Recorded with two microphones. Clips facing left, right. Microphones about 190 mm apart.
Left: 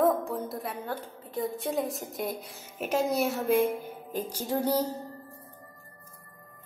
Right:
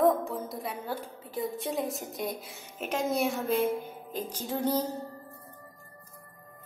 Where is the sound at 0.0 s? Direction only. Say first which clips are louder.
Even; centre (ahead or behind).